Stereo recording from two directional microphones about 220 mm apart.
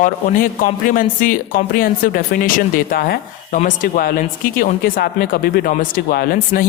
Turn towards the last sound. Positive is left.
turn(degrees=40)  # may be behind; listen again after turning